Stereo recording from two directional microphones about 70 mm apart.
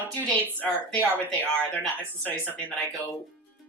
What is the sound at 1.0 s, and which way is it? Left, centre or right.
Speech, right.